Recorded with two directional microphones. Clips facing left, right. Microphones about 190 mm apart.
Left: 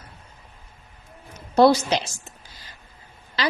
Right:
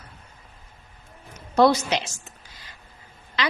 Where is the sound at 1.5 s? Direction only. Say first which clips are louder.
Left 2 dB; 35° left (ahead or behind).